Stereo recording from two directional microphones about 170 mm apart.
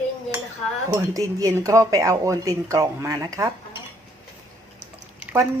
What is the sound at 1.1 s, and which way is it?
Speech, 20° right (ahead or behind).